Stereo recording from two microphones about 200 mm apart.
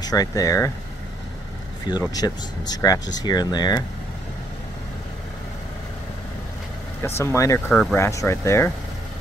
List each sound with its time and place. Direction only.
0.0 s speech: 20° left (ahead or behind)
2.1 s speech: 20° left (ahead or behind)
7.0 s speech: 10° left (ahead or behind)